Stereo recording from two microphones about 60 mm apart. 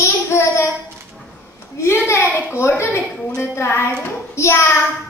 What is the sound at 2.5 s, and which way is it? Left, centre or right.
A woman's voice, left.